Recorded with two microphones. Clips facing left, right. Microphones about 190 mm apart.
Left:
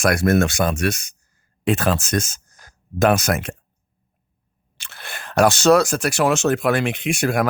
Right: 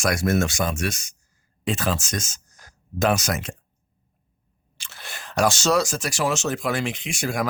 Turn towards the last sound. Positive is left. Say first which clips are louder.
# left 6 dB
turn(degrees=60)  # may be behind; listen again after turning